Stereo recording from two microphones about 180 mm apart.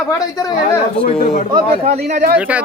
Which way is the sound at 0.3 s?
20° left (ahead or behind).